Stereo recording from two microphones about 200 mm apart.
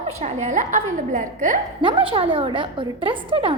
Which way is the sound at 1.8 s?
25° right (ahead or behind).